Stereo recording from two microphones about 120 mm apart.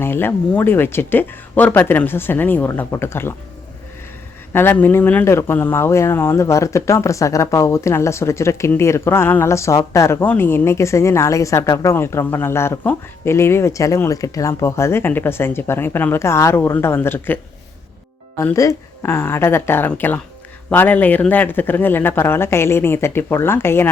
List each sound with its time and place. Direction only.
0.0 s speech: 20° left (ahead or behind)
4.5 s speech: 15° left (ahead or behind)
18.5 s speech: 25° left (ahead or behind)